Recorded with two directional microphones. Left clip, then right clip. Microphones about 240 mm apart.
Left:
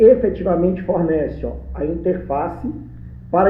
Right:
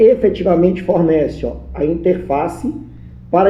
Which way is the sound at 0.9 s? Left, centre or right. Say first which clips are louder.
Right 5 dB; right.